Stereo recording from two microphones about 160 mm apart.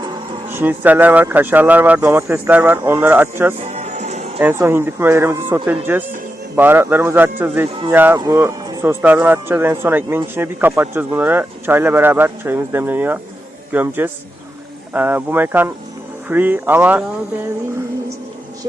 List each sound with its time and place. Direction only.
0.5 s speech: 10° right (ahead or behind)
3.6 s music: 45° right (ahead or behind)
4.4 s speech: 15° right (ahead or behind)